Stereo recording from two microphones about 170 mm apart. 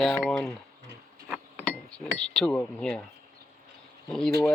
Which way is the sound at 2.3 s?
5° left (ahead or behind).